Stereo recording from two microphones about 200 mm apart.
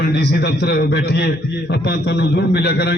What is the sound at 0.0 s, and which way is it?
A man's voice, 55° left (ahead or behind).